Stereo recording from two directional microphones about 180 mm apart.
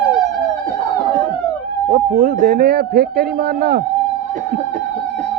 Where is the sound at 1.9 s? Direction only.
55° right (ahead or behind).